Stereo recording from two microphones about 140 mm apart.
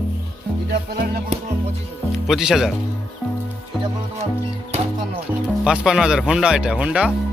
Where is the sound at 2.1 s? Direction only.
5° right (ahead or behind).